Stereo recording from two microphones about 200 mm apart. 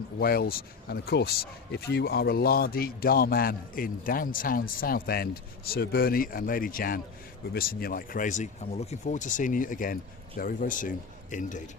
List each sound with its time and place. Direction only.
0.2 s speech: 50° left (ahead or behind)